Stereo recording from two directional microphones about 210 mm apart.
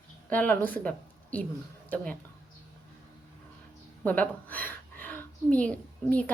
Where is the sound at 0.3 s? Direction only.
5° left (ahead or behind).